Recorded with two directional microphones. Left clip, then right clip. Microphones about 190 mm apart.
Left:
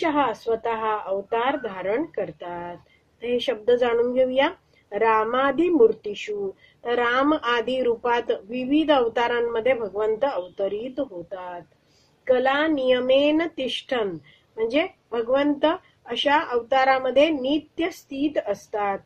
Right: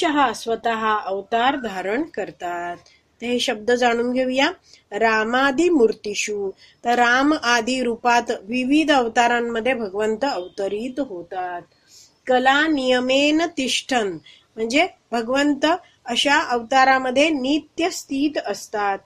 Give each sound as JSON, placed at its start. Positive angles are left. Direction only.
{"t": 0.0, "sound": "speech", "side_deg": -35}